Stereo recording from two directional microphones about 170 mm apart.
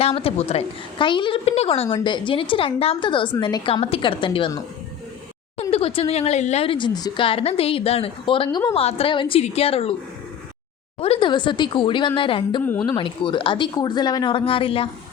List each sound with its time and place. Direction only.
0.0 s a woman's voice: 35° left (ahead or behind)
5.7 s a woman's voice: 35° left (ahead or behind)
11.0 s speech: 35° left (ahead or behind)